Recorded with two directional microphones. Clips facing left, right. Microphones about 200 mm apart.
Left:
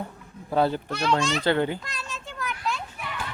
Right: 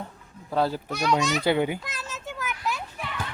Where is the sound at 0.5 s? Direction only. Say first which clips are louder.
Left 2 dB; centre (ahead or behind).